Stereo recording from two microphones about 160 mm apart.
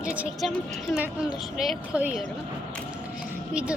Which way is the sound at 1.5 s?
5° right (ahead or behind).